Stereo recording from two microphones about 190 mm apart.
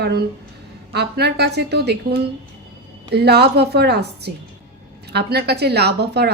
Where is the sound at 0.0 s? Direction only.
60° right (ahead or behind).